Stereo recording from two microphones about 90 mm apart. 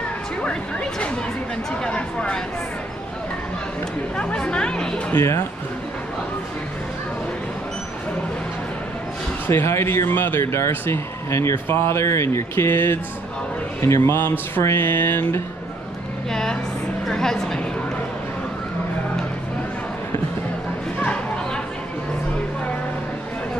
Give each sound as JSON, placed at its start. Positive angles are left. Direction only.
{"t": 0.4, "sound": "speech", "side_deg": 10}
{"t": 4.2, "sound": "speech", "side_deg": 10}
{"t": 5.1, "sound": "a man's voice", "side_deg": 30}
{"t": 9.5, "sound": "a man's voice", "side_deg": 30}
{"t": 16.3, "sound": "a woman's voice", "side_deg": 5}